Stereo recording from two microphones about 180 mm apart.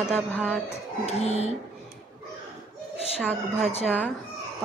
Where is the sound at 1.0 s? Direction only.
35° left (ahead or behind).